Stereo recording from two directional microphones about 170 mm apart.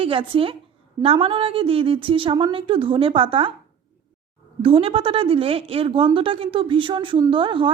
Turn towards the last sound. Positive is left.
turn(degrees=-30)  # may be behind; listen again after turning